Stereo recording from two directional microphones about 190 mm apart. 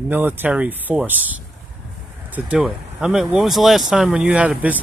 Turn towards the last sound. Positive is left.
turn(degrees=-5)  # may be behind; listen again after turning